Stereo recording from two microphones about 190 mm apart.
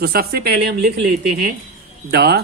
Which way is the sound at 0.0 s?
55° right (ahead or behind).